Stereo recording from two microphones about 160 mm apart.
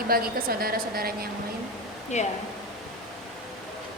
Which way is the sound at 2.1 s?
45° left (ahead or behind).